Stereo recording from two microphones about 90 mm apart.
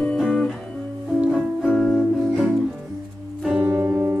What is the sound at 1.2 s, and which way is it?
Music, 10° right (ahead or behind).